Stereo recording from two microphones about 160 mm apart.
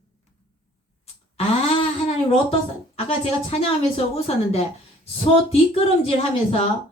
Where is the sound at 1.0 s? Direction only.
40° left (ahead or behind).